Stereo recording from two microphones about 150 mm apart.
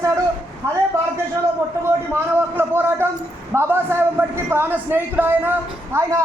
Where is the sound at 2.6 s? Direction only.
15° right (ahead or behind).